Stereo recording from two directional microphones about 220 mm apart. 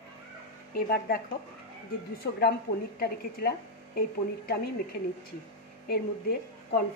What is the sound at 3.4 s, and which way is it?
A woman's voice, 45° left (ahead or behind).